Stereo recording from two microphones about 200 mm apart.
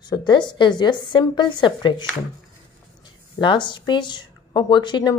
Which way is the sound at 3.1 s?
25° left (ahead or behind).